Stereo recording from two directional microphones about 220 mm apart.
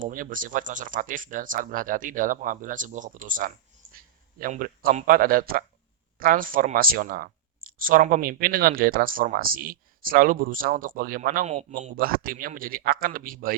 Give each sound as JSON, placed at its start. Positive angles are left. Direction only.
{"t": 0.0, "sound": "speech", "side_deg": -35}